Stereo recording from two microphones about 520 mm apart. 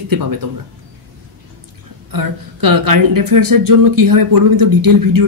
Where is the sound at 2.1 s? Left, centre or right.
Right.